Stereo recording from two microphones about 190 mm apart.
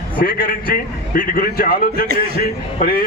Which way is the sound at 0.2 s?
50° left (ahead or behind).